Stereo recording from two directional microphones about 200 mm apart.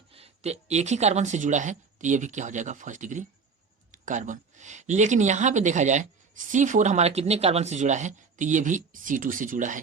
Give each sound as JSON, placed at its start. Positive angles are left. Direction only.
{"t": 0.1, "sound": "speech", "side_deg": -30}